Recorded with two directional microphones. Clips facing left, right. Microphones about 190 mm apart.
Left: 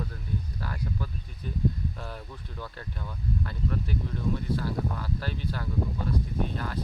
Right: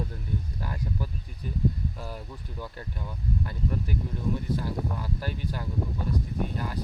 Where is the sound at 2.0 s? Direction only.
10° right (ahead or behind).